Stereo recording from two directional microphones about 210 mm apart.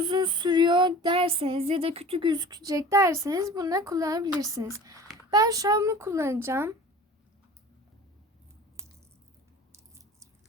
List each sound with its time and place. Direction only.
0.0 s female singing: 20° right (ahead or behind)
4.4 s a child's voice: 15° right (ahead or behind)